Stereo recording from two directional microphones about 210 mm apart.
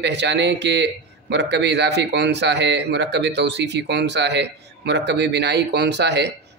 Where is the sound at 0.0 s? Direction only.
55° right (ahead or behind).